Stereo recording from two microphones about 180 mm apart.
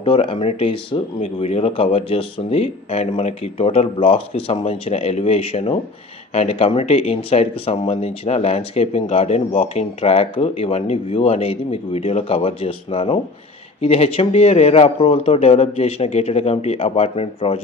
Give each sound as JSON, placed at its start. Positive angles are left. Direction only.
{"t": 0.0, "sound": "speech", "side_deg": 30}